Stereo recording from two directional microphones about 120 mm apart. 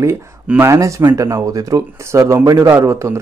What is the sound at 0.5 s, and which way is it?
Speech, 20° right (ahead or behind).